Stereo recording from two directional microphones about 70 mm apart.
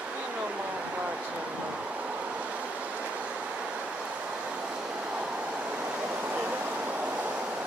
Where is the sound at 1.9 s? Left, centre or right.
Centre.